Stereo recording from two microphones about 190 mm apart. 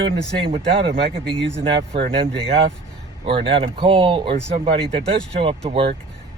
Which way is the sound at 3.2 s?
25° right (ahead or behind).